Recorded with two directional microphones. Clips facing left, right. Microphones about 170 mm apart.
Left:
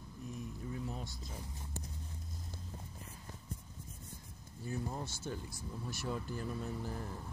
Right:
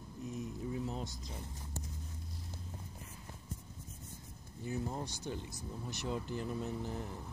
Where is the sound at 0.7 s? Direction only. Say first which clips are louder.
Right 3 dB; 20° right (ahead or behind).